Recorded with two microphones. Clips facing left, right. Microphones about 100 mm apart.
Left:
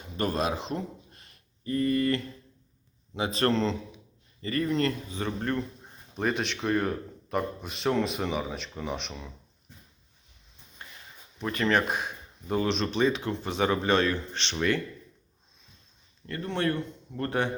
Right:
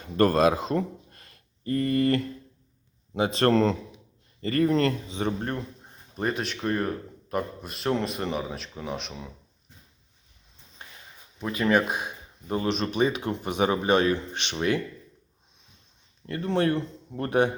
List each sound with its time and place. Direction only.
0.2 s speech: 45° right (ahead or behind)
5.0 s a man's voice: 20° right (ahead or behind)
6.1 s a man's voice: centre (ahead or behind)
11.3 s speech: 5° right (ahead or behind)
16.2 s a man's voice: 20° right (ahead or behind)